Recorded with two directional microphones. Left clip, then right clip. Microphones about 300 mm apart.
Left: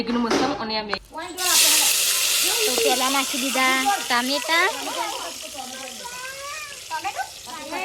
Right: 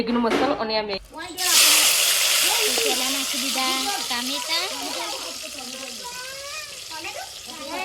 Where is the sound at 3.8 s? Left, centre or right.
Centre.